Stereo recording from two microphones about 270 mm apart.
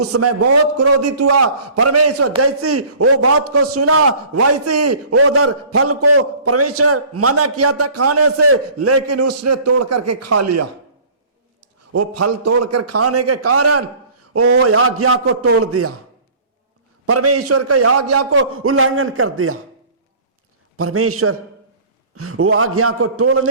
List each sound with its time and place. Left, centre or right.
0.0 s a man's voice: right
11.9 s a man's voice: right
17.1 s a man's voice: right
20.7 s a man's voice: right